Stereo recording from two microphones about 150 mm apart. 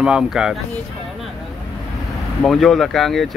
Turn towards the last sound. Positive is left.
turn(degrees=0)  # may be behind; listen again after turning